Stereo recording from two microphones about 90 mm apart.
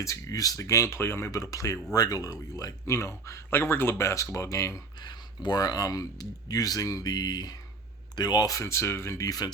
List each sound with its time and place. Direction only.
0.0 s speech: 35° left (ahead or behind)
4.9 s speech: 55° left (ahead or behind)
8.5 s speech: 30° left (ahead or behind)